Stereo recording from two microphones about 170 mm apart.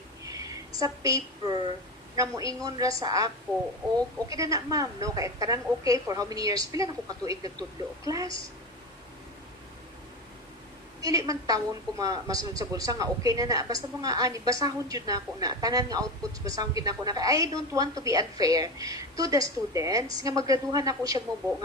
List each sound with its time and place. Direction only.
0.3 s a sound: 20° right (ahead or behind)
0.8 s a woman's voice: 20° right (ahead or behind)
11.0 s a woman's voice: 20° right (ahead or behind)